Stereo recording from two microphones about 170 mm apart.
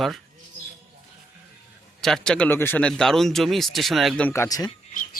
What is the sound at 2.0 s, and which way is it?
A man's voice, 5° left (ahead or behind).